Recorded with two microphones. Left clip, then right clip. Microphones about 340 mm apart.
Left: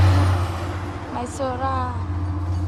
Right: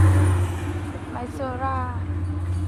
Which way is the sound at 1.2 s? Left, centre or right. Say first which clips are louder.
Left 4 dB; centre.